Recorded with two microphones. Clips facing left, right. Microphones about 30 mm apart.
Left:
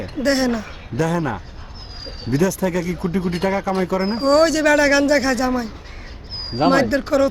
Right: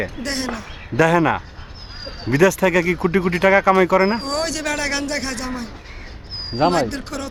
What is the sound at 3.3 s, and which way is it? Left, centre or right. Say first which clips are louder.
Speech: right 8 dB; right.